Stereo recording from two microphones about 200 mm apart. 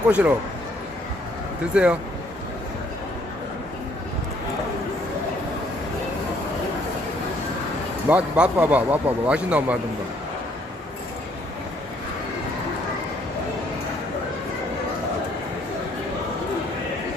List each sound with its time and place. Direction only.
0.1 s a man's voice: 5° right (ahead or behind)
1.7 s speech: 5° right (ahead or behind)
8.1 s a man's voice: 5° right (ahead or behind)